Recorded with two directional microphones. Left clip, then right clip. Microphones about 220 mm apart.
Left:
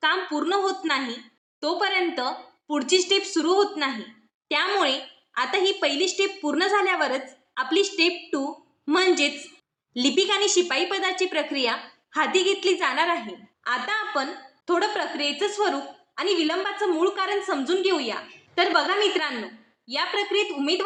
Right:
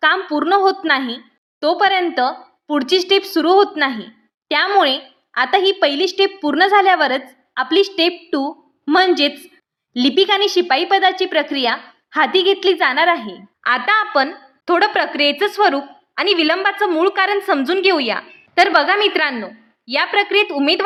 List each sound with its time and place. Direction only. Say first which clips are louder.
0.0 s a woman's voice: right 8 dB; 45° right (ahead or behind)